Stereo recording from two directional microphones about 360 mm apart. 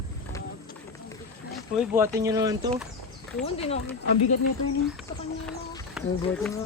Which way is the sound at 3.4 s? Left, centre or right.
Centre.